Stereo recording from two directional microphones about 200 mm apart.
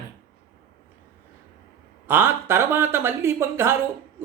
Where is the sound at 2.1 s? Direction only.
10° right (ahead or behind).